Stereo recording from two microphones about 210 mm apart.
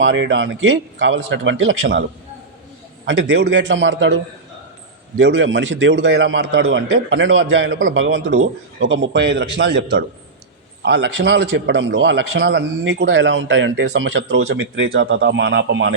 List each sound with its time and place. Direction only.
0.0 s a man's voice: 60° right (ahead or behind)
3.1 s a man's voice: 60° right (ahead or behind)